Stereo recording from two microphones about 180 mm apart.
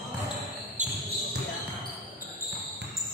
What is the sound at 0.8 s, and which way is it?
Basketball bounce, 40° right (ahead or behind).